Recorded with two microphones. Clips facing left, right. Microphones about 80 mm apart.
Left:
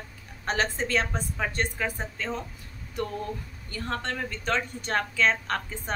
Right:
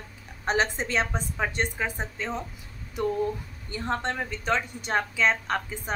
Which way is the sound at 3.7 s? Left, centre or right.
Right.